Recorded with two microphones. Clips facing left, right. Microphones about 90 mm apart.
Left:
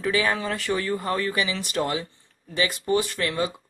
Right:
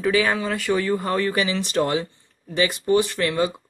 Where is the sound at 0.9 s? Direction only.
30° right (ahead or behind).